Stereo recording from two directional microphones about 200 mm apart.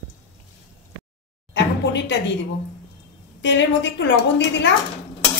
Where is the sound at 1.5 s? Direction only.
60° left (ahead or behind).